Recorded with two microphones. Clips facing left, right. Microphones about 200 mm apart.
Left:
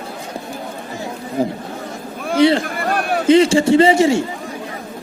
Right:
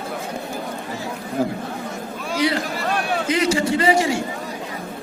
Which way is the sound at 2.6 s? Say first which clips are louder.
Left 3 dB; 55° left (ahead or behind).